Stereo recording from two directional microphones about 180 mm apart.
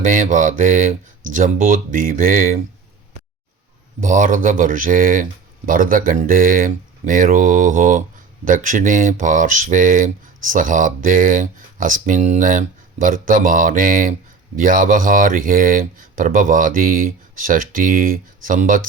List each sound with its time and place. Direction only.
0.0 s speech: 45° right (ahead or behind)
4.0 s speech: 45° right (ahead or behind)